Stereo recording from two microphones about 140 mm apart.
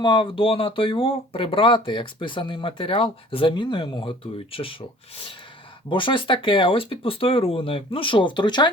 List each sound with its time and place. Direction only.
0.0 s speech: 35° left (ahead or behind)
5.9 s speech: 35° left (ahead or behind)